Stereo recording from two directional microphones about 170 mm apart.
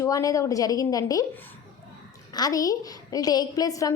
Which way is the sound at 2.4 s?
20° left (ahead or behind).